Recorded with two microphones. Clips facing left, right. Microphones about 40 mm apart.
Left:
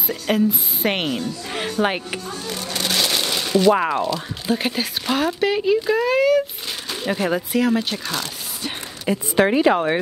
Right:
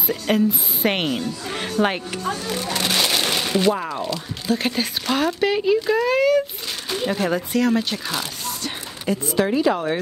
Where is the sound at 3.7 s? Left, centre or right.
Left.